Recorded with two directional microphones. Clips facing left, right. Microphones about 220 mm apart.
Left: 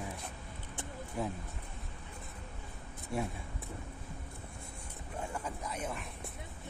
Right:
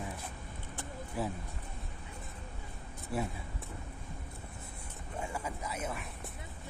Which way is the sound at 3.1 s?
Centre (ahead or behind).